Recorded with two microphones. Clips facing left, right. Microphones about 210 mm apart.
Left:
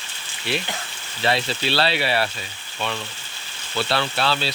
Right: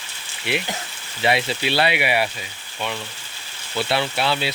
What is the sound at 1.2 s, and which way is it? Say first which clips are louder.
Speech: right 2 dB; 15° right (ahead or behind).